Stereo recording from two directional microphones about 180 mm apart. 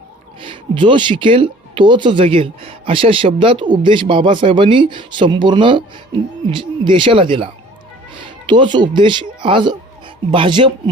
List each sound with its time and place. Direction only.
0.4 s speech: 30° right (ahead or behind)